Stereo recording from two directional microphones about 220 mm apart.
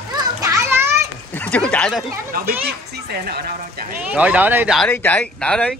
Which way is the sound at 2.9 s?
45° right (ahead or behind).